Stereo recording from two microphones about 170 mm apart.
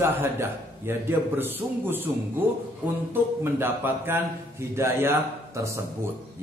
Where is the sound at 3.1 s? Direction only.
10° right (ahead or behind).